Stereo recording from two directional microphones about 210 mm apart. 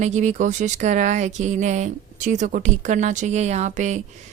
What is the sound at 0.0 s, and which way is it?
Speech, 35° right (ahead or behind).